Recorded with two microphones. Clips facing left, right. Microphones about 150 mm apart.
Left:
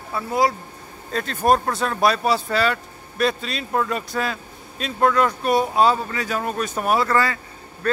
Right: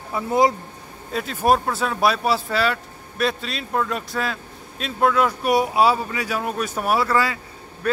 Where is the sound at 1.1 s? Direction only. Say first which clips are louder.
Even; 5° right (ahead or behind).